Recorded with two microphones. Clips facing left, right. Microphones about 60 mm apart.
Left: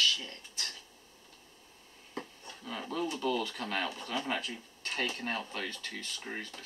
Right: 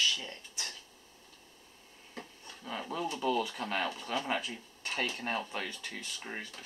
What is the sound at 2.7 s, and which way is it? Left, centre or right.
Speech, centre.